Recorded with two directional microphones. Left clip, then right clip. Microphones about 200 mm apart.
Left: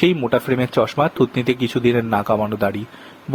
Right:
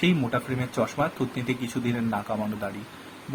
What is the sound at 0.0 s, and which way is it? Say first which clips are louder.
Speech: left 9 dB; 45° left (ahead or behind).